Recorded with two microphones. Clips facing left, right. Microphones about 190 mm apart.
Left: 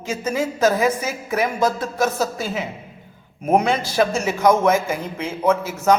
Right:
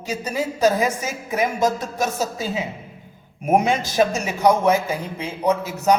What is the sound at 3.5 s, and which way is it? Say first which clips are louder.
A man's voice: even; 15° right (ahead or behind).